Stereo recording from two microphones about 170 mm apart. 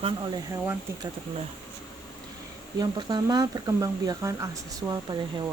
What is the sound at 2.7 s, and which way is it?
Speech, 20° right (ahead or behind).